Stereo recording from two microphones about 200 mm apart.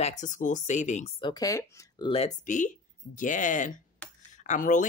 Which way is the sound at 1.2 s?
20° left (ahead or behind).